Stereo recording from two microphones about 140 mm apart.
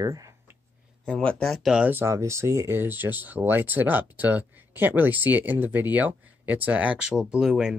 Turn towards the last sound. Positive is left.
turn(degrees=-5)  # may be behind; listen again after turning